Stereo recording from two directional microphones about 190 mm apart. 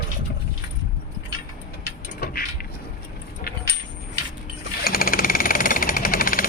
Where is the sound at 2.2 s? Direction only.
50° left (ahead or behind).